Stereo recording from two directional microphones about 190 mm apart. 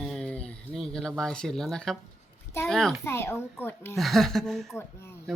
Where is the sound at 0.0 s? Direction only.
Centre (ahead or behind).